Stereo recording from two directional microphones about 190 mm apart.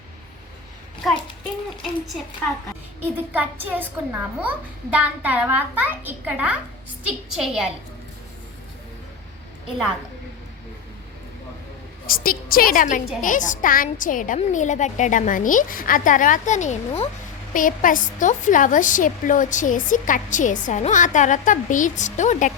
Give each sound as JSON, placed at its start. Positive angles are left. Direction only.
{"t": 1.8, "sound": "a child's voice", "side_deg": 0}
{"t": 12.0, "sound": "a woman's voice", "side_deg": 50}